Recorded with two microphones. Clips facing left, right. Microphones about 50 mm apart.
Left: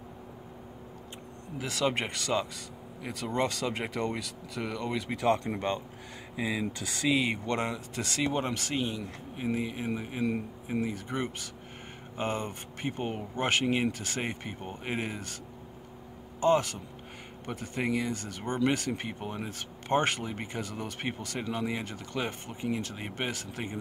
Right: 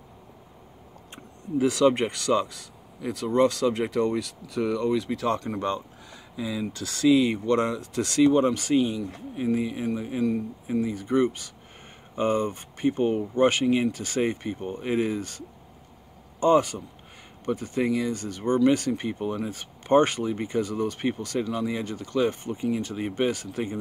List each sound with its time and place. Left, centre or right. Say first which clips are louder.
1.6 s speech: right 9 dB; centre
5.1 s speech: right 1 dB; centre
18.1 s speech: right 5 dB; centre
18.4 s speech: right 8 dB; left
18.9 s speech: right 7 dB; centre